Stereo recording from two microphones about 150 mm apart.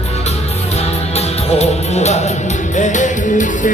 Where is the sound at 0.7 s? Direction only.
45° left (ahead or behind).